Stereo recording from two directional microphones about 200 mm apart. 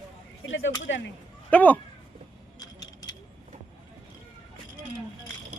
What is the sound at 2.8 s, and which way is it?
Keys jangling, 20° left (ahead or behind).